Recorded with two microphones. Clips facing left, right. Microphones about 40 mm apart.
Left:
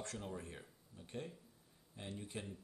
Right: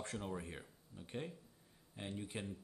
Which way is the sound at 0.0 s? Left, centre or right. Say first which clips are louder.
Right 2 dB; right.